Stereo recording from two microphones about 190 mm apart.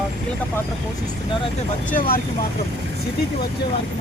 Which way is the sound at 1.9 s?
50° left (ahead or behind).